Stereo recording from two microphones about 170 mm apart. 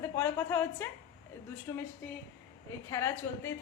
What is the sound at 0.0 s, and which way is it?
A woman's voice, 15° left (ahead or behind).